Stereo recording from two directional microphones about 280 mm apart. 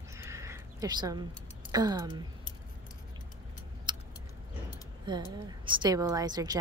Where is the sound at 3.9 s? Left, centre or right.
Centre.